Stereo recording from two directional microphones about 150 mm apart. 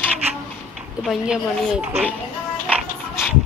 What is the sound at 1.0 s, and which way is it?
Speech, 5° right (ahead or behind).